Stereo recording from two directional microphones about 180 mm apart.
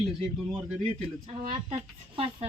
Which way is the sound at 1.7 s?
30° right (ahead or behind).